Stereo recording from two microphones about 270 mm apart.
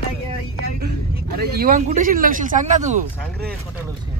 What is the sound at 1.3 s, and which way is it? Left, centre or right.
Speech, right.